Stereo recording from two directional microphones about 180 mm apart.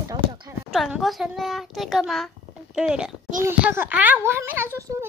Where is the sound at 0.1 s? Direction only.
20° right (ahead or behind).